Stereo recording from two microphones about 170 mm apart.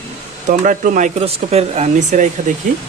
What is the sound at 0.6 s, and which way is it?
Speech, 50° right (ahead or behind).